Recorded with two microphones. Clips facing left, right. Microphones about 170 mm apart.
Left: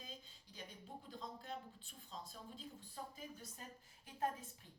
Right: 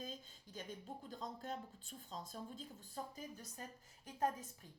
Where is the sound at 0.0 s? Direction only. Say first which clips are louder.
Right 6 dB; 45° right (ahead or behind).